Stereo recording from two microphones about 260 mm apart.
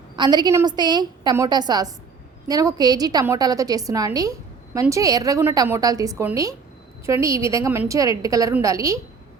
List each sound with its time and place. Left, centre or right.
0.2 s a woman's voice: centre